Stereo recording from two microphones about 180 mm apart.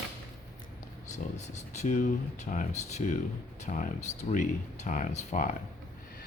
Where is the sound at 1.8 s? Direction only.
40° left (ahead or behind).